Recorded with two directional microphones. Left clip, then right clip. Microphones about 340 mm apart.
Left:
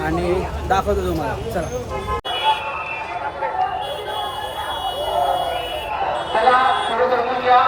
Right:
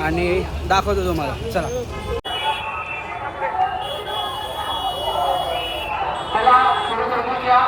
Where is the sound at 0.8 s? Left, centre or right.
Centre.